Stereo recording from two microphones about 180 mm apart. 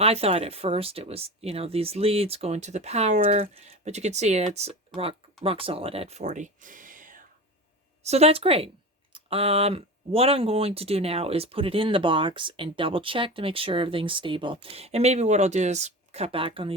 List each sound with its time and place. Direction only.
0.0 s speech: 35° right (ahead or behind)
8.0 s speech: 35° right (ahead or behind)